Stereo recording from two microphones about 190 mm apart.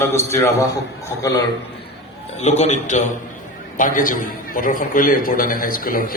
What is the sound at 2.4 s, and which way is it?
A man's voice, 35° left (ahead or behind).